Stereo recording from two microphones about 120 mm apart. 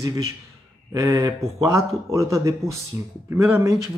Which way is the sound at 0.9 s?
30° right (ahead or behind).